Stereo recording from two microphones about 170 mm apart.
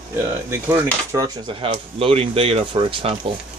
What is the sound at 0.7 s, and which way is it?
Speech, 15° right (ahead or behind).